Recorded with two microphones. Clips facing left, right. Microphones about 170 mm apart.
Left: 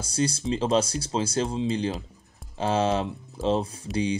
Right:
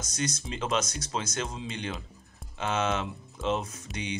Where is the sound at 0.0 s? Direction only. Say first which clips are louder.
Left 7 dB; 30° left (ahead or behind).